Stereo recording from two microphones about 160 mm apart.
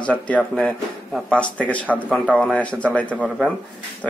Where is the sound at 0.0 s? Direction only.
10° left (ahead or behind).